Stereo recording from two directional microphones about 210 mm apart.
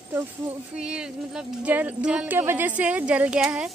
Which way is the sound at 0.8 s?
5° right (ahead or behind).